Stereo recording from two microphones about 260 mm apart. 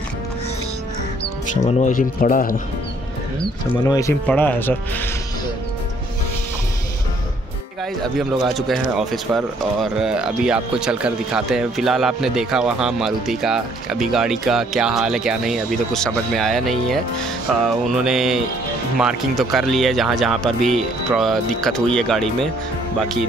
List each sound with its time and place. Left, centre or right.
1.2 s speech: left
3.8 s speech: centre
8.0 s speech: centre